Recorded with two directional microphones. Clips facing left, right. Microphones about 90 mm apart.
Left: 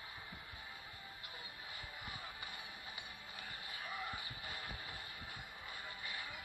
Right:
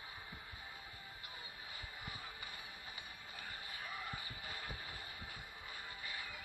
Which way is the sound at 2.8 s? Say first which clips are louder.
Left 1 dB; 30° right (ahead or behind).